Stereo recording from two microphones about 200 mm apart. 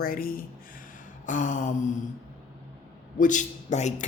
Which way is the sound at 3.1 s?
40° left (ahead or behind).